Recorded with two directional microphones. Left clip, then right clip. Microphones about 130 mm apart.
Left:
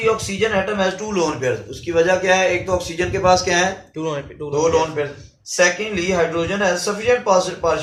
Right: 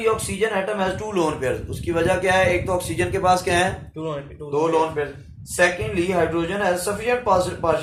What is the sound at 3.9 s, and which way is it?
Speech, 50° left (ahead or behind).